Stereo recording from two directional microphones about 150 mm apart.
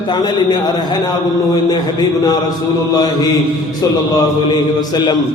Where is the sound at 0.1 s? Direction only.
30° left (ahead or behind).